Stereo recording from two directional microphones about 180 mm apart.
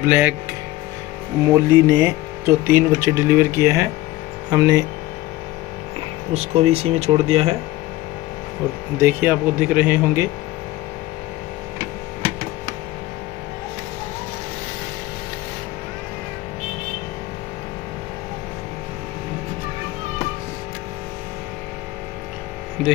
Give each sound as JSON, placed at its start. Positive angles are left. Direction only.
{"t": 0.0, "sound": "speech", "side_deg": -10}
{"t": 1.4, "sound": "speech", "side_deg": -15}
{"t": 6.3, "sound": "speech", "side_deg": -35}
{"t": 8.9, "sound": "speech", "side_deg": -10}